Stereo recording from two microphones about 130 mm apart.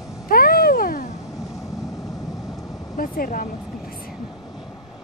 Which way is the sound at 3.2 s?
90° left.